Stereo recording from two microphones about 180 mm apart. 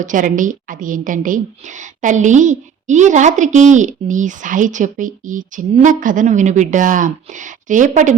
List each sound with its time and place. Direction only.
0.0 s a woman's voice: 45° right (ahead or behind)